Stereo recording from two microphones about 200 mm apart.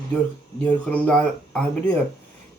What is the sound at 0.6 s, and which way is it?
Speech, 5° left (ahead or behind).